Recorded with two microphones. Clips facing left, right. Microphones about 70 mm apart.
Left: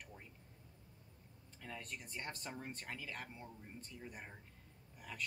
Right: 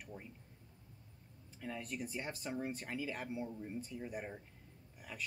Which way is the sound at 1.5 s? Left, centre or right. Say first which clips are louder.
Right 6 dB; centre.